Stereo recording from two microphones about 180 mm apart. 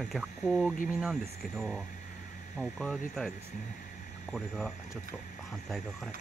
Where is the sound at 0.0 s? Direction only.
Centre (ahead or behind).